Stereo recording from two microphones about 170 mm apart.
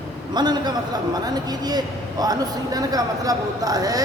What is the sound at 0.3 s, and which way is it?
A man's voice, 25° right (ahead or behind).